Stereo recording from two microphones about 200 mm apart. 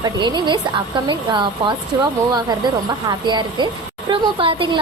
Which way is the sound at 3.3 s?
20° right (ahead or behind).